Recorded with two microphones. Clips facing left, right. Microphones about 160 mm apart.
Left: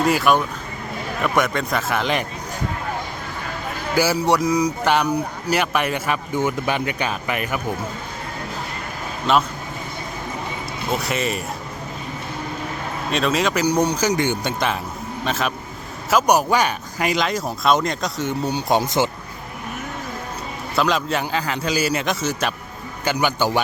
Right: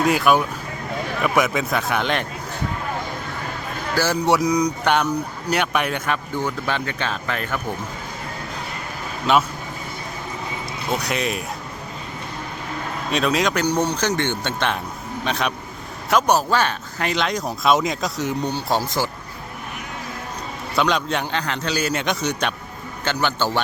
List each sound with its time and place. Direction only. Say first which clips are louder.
0.0 s speech: even; centre (ahead or behind)
3.9 s speech: left 1 dB; 10° left (ahead or behind)
6.3 s speech: left 3 dB; 15° left (ahead or behind)
9.3 s speech: even; centre (ahead or behind)
10.9 s speech: even; centre (ahead or behind)
13.1 s speech: even; centre (ahead or behind)
18.5 s speech: left 3 dB; 20° left (ahead or behind)
20.7 s speech: even; centre (ahead or behind)